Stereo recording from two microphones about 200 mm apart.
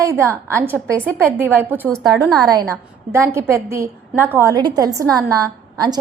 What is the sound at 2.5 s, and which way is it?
A woman's voice, 15° right (ahead or behind).